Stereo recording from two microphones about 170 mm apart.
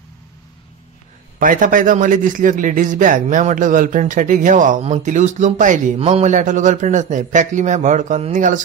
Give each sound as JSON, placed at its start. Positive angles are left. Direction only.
{"t": 1.4, "sound": "a man's voice", "side_deg": -50}